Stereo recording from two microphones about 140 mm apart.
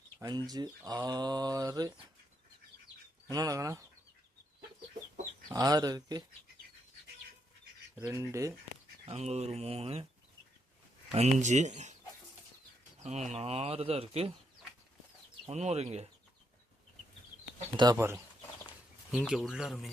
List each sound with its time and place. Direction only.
0.2 s mantra: 30° right (ahead or behind)
3.2 s mantra: 25° right (ahead or behind)
5.5 s mantra: 25° right (ahead or behind)
8.1 s mantra: 20° right (ahead or behind)
9.0 s speech: 50° right (ahead or behind)
11.1 s speech: 55° right (ahead or behind)
13.0 s speech: 55° right (ahead or behind)
15.4 s speech: 50° right (ahead or behind)
17.7 s mantra: 30° right (ahead or behind)
19.1 s speech: centre (ahead or behind)